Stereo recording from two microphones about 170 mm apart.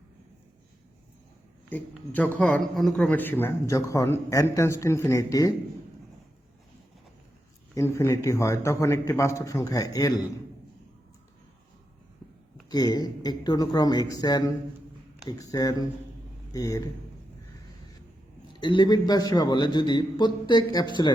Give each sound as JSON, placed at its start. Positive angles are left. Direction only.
{"t": 2.1, "sound": "a man's voice", "side_deg": 10}
{"t": 7.8, "sound": "a man's voice", "side_deg": 15}
{"t": 12.7, "sound": "a man's voice", "side_deg": 25}
{"t": 18.6, "sound": "a man's voice", "side_deg": 25}